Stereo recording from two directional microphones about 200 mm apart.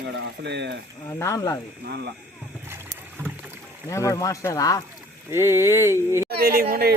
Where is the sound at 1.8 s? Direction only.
55° right (ahead or behind).